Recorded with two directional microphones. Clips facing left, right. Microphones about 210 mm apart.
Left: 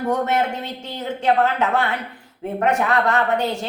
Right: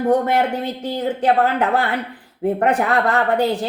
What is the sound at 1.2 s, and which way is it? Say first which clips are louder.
A woman's voice: right 1 dB; 35° right (ahead or behind).